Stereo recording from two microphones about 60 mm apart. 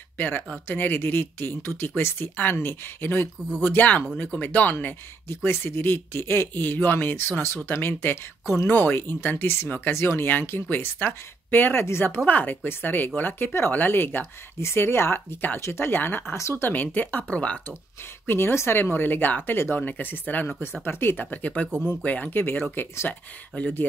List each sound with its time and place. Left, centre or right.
0.7 s speech: left
12.3 s speech: left
16.3 s speech: left
16.6 s speech: left
18.2 s speech: left
18.8 s speech: left
21.6 s speech: centre
22.0 s speech: left